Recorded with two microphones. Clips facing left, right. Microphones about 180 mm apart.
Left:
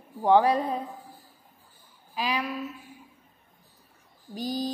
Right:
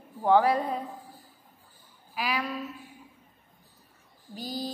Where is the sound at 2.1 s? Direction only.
20° left (ahead or behind).